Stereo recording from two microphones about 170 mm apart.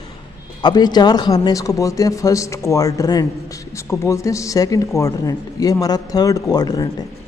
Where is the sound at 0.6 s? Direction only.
25° left (ahead or behind).